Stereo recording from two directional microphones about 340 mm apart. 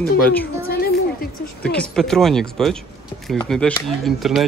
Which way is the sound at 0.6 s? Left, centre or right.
Left.